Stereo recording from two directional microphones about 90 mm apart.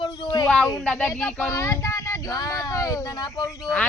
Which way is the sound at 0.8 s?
15° left (ahead or behind).